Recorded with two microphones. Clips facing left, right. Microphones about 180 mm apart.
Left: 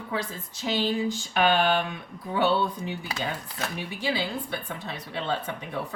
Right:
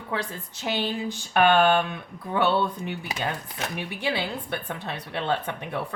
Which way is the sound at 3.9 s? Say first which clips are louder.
Even; 60° right (ahead or behind).